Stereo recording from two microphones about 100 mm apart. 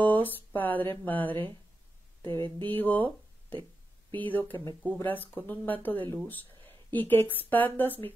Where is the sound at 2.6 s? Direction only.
20° left (ahead or behind).